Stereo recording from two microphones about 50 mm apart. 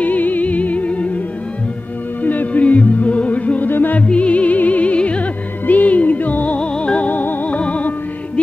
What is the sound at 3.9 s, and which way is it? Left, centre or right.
Music, left.